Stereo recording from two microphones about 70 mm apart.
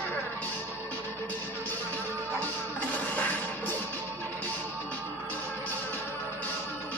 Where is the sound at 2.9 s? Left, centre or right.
Left.